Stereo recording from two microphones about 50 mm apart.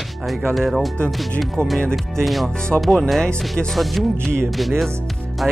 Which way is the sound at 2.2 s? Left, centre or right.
Centre.